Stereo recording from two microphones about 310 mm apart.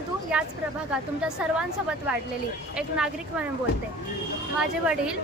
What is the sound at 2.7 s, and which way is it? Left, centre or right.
Speech, centre.